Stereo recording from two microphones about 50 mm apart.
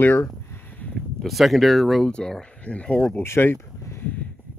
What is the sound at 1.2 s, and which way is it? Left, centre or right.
Speech, centre.